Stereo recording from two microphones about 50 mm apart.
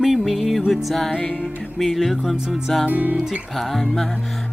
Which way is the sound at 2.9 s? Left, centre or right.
Right.